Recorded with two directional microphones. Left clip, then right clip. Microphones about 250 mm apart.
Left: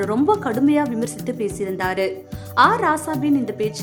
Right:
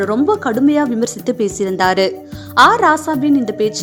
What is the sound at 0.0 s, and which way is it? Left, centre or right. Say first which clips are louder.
A woman's voice: right 4 dB; centre.